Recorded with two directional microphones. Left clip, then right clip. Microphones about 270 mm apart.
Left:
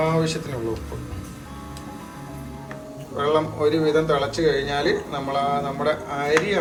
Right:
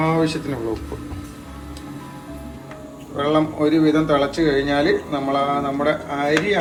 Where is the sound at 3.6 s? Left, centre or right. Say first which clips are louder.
Right 1 dB; centre.